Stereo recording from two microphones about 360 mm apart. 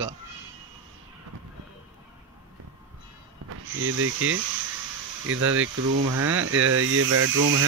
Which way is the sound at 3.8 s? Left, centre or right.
Right.